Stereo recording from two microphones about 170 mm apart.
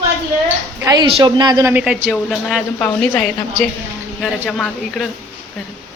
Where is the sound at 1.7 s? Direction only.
5° right (ahead or behind).